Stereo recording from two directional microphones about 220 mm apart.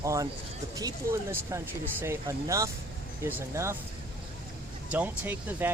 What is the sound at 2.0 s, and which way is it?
Speech, 10° right (ahead or behind).